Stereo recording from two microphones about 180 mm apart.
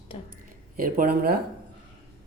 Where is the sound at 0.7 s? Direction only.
50° right (ahead or behind).